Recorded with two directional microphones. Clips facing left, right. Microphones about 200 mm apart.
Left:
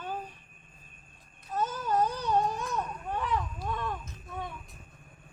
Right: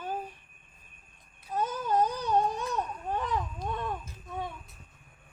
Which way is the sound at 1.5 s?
15° right (ahead or behind).